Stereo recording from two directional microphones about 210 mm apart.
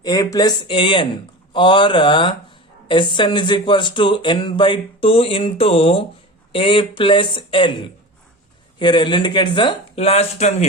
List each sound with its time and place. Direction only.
0.0 s speech: 15° left (ahead or behind)
8.8 s speech: 20° left (ahead or behind)